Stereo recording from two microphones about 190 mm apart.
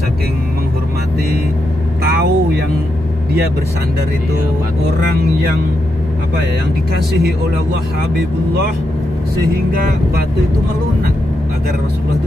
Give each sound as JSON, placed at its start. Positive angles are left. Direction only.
{"t": 2.0, "sound": "vehicle", "side_deg": -55}
{"t": 9.7, "sound": "speech", "side_deg": -50}